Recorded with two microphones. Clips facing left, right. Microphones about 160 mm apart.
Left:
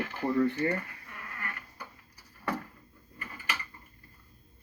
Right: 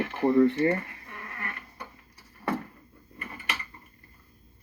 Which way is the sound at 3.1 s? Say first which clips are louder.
Right 2 dB; 20° right (ahead or behind).